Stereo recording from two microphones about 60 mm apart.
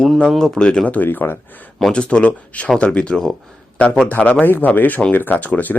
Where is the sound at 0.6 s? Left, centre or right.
Left.